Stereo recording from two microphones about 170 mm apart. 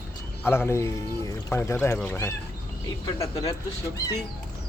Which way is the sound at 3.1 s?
20° left (ahead or behind).